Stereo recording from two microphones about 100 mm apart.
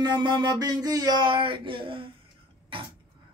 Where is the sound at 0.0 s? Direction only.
50° right (ahead or behind).